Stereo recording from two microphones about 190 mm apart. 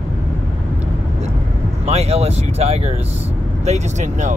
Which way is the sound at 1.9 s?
35° right (ahead or behind).